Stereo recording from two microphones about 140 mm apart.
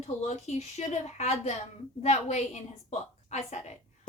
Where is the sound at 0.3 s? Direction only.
55° left (ahead or behind).